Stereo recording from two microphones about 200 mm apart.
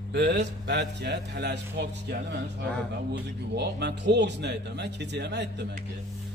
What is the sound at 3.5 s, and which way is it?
A man's voice, 55° right (ahead or behind).